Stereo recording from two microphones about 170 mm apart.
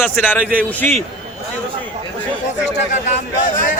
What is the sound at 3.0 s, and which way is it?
Speech, 45° left (ahead or behind).